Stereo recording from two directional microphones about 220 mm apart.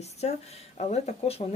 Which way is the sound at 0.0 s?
30° left (ahead or behind).